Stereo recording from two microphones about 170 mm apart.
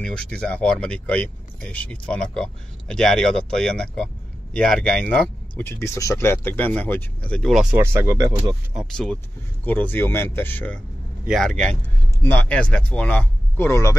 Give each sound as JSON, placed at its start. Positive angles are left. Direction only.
{"t": 0.0, "sound": "speech", "side_deg": 5}
{"t": 7.7, "sound": "speech", "side_deg": -15}
{"t": 8.7, "sound": "speech", "side_deg": 5}